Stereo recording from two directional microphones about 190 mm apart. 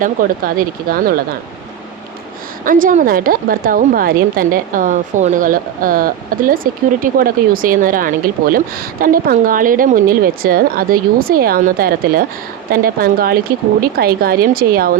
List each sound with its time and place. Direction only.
0.0 s speech: 50° right (ahead or behind)
2.6 s speech: 45° right (ahead or behind)